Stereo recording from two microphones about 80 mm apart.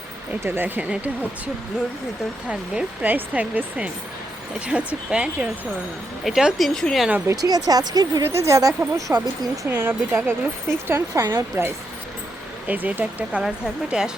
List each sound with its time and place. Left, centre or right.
0.4 s speech: right
2.5 s speech: centre
6.2 s speech: centre
6.7 s speech: centre
7.4 s speech: right
8.2 s speech: right
9.6 s speech: right
12.6 s speech: right
13.9 s speech: centre